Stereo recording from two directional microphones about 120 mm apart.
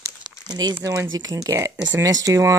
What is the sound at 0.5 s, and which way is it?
Speech, 35° right (ahead or behind).